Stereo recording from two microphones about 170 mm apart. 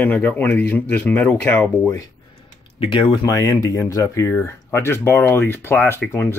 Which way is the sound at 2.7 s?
30° left (ahead or behind).